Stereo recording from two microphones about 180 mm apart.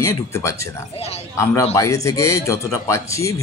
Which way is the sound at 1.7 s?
15° left (ahead or behind).